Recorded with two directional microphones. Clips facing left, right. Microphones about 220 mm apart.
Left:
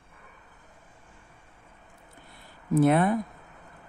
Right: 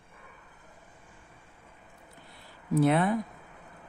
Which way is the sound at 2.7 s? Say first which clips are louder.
Left 3 dB; 50° left (ahead or behind).